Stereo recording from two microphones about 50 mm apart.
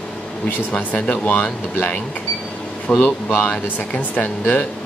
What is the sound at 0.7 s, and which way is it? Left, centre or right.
Speech, left.